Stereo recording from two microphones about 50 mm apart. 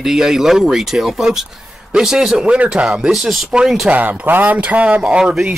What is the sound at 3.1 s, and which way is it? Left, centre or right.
Speech, centre.